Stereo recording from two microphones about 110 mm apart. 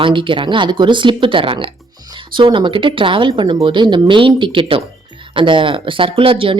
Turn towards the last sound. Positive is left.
turn(degrees=-55)  # may be behind; listen again after turning